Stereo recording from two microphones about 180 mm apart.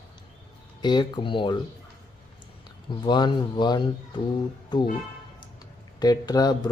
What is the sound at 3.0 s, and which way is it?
Speech, 25° left (ahead or behind).